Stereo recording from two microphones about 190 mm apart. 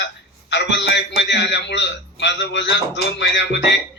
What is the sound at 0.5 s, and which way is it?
Speech, 65° left (ahead or behind).